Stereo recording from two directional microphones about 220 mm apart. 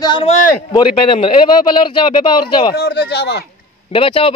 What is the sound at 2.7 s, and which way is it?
Speech, 45° left (ahead or behind).